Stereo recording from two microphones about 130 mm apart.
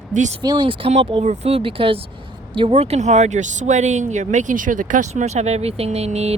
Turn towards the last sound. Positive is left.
turn(degrees=-55)  # may be behind; listen again after turning